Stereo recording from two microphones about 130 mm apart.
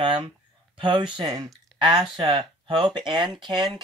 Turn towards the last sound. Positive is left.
turn(degrees=-35)  # may be behind; listen again after turning